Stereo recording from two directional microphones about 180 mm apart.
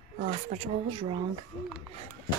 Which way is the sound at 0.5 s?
40° right (ahead or behind).